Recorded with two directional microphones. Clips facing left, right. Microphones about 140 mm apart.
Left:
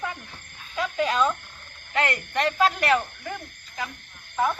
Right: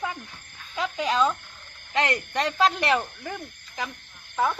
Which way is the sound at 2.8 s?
15° right (ahead or behind).